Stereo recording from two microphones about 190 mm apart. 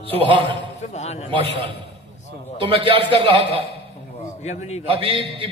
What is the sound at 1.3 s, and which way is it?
A man's voice, 25° right (ahead or behind).